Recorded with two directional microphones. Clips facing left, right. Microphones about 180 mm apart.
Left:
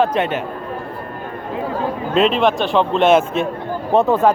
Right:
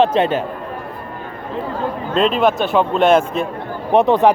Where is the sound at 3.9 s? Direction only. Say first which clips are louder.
Right 2 dB; 15° right (ahead or behind).